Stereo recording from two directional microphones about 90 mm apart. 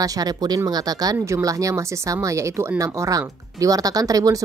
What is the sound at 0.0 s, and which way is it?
Speech, 45° right (ahead or behind).